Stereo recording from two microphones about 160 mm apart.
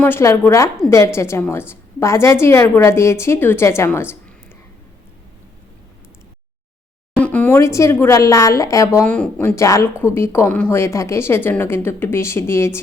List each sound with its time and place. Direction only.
0.0 s a woman's voice: 15° left (ahead or behind)
7.2 s a woman's voice: 10° left (ahead or behind)
9.6 s a woman's voice: 20° left (ahead or behind)